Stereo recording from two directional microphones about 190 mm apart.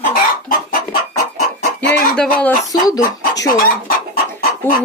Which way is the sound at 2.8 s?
20° left (ahead or behind).